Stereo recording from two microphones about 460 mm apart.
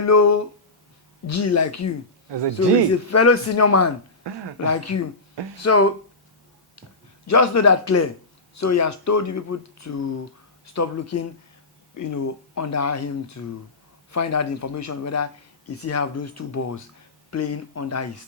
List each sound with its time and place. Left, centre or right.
0.0 s a man's voice: left
4.2 s speech: right
4.6 s a man's voice: left
7.3 s a man's voice: left